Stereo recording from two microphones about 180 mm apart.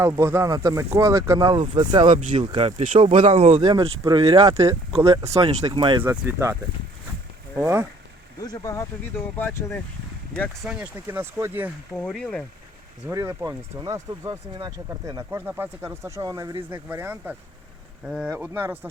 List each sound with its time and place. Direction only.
0.0 s speech: 15° right (ahead or behind)
2.0 s speech: 45° right (ahead or behind)
2.5 s speech: 35° right (ahead or behind)
3.6 s speech: 25° right (ahead or behind)
6.0 s speech: 15° right (ahead or behind)
7.6 s speech: 15° right (ahead or behind)
8.4 s speech: 20° left (ahead or behind)
10.7 s speech: 10° right (ahead or behind)
11.9 s speech: 5° left (ahead or behind)
13.1 s speech: 15° right (ahead or behind)